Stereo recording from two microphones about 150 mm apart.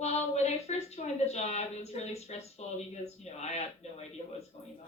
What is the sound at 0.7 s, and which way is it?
A woman's voice, 45° left (ahead or behind).